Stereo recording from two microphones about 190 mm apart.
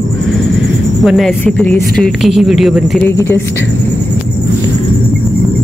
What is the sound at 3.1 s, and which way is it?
Speech, 10° left (ahead or behind).